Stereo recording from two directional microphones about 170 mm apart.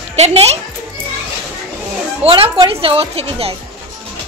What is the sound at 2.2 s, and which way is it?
A woman's voice, 30° right (ahead or behind).